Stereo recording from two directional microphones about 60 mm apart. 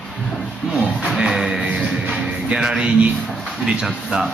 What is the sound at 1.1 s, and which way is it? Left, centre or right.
Speech, centre.